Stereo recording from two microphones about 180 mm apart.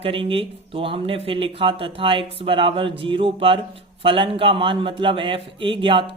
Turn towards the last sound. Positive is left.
turn(degrees=-30)  # may be behind; listen again after turning